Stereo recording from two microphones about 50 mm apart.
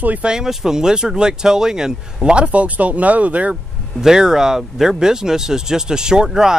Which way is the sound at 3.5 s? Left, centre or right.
Centre.